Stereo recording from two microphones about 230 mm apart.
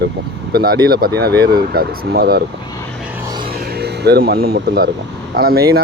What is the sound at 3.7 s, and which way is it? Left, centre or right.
Speech, right.